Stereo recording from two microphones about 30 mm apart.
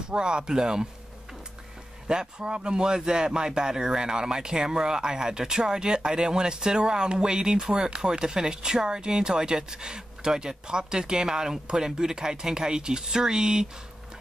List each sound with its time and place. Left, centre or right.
0.1 s speech: right
2.0 s speech: right